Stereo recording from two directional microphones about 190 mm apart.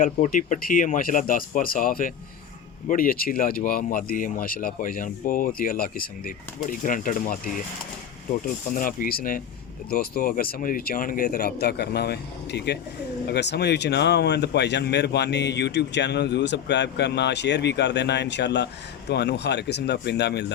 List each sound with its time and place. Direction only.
0.0 s speech: 45° left (ahead or behind)
8.7 s speech: 45° left (ahead or behind); by 20.5 s 60° left (ahead or behind)